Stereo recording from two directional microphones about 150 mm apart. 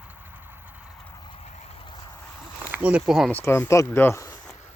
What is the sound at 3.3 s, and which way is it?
Speech, 15° left (ahead or behind).